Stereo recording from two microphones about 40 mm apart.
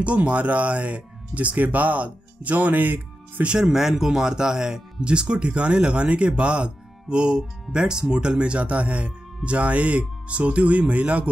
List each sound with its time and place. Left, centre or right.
0.0 s speech: right
3.6 s speech: centre; by 11.2 s right